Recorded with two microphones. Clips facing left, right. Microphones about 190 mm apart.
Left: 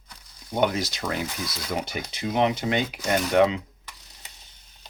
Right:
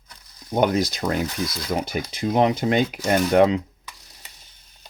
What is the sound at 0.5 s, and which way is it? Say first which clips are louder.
Speech: right 4 dB; 45° right (ahead or behind).